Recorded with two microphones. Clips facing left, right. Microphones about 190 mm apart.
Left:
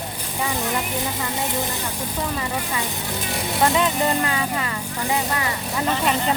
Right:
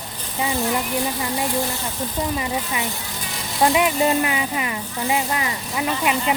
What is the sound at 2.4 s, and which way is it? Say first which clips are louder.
Speech: right 1 dB; 15° right (ahead or behind).